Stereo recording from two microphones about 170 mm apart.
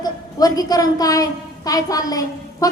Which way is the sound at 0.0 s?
20° left (ahead or behind).